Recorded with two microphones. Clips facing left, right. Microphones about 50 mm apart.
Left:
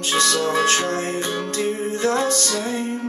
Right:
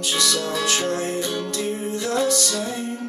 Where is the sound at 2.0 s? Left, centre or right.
Left.